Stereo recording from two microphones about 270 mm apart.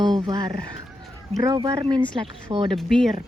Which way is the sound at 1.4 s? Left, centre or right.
Centre.